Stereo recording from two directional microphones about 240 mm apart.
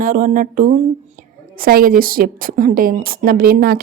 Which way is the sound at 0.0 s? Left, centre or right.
Right.